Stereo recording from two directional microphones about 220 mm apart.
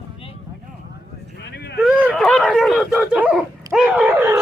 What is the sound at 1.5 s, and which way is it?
Speech, 50° left (ahead or behind).